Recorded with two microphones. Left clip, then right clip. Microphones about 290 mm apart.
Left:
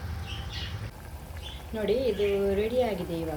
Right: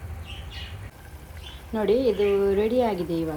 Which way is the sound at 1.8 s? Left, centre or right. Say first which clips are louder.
Right 5 dB; centre.